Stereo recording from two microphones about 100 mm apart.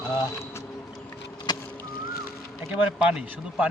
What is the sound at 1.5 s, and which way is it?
Vehicle, 45° left (ahead or behind).